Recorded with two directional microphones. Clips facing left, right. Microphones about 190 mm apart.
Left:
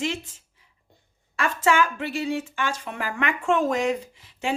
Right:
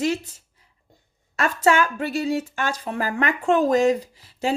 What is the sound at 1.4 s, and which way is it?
A woman's voice, 40° right (ahead or behind).